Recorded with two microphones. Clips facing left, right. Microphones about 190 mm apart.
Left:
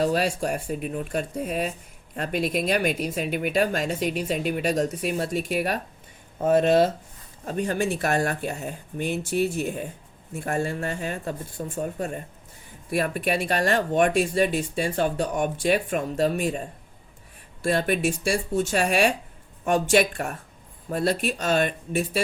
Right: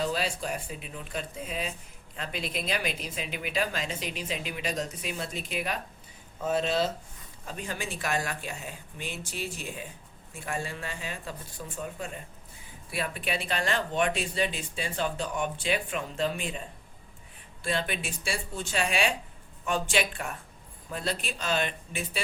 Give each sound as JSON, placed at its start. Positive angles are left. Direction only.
{"t": 0.0, "sound": "speech", "side_deg": 55}